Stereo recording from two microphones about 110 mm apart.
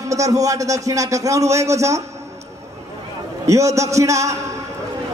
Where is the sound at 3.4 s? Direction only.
30° right (ahead or behind).